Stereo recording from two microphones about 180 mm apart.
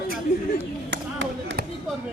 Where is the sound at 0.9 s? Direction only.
80° right.